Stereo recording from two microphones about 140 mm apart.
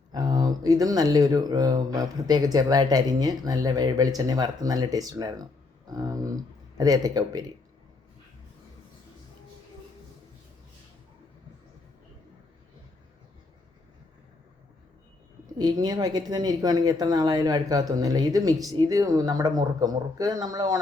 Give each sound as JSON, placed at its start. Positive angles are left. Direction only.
{"t": 0.1, "sound": "speech", "side_deg": -30}
{"t": 15.5, "sound": "speech", "side_deg": -30}